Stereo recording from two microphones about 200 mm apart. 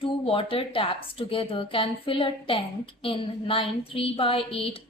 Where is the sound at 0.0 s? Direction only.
25° left (ahead or behind).